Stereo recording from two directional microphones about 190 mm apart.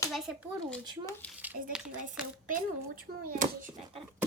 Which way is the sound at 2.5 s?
50° right (ahead or behind).